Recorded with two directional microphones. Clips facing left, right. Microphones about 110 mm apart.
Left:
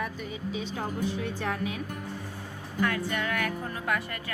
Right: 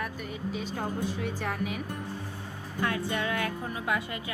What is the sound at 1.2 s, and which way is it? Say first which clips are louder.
Speech: left 1 dB; 5° right (ahead or behind).